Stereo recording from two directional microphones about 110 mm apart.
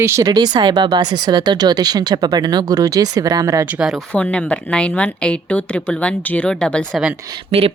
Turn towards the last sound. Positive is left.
turn(degrees=-65)  # may be behind; listen again after turning